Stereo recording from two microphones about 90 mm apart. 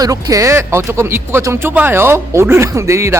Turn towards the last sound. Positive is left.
turn(degrees=-30)  # may be behind; listen again after turning